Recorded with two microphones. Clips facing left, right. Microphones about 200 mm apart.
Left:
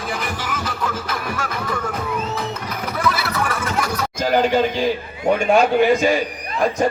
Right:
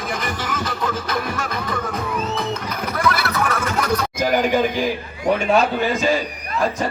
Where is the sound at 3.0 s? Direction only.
5° left (ahead or behind).